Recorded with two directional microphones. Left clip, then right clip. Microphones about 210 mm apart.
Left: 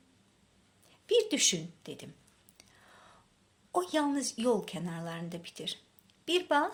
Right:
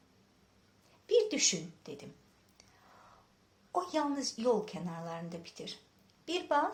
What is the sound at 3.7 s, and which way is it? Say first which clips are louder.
Speech: left 3 dB; 40° left (ahead or behind).